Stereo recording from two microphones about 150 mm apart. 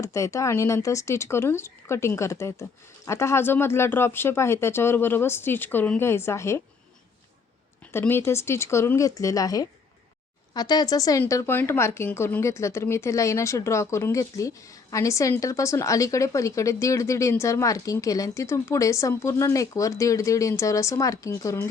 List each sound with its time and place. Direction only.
0.0 s speech: 20° left (ahead or behind)
7.9 s speech: 15° left (ahead or behind)